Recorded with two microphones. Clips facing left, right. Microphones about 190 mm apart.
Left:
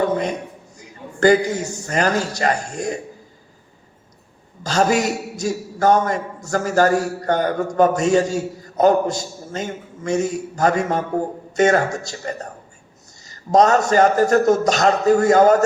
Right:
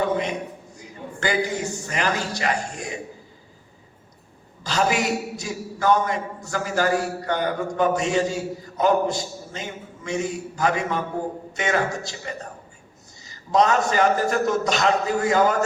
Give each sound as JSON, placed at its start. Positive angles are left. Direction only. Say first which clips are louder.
{"t": 1.2, "sound": "a man's voice", "louder": "left 9 dB", "side_deg": 45}
{"t": 4.6, "sound": "a man's voice", "louder": "left 5 dB", "side_deg": 45}